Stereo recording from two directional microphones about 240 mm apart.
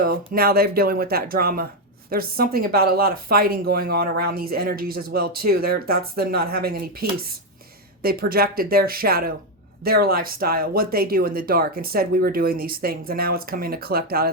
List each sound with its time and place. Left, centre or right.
0.0 s speech: right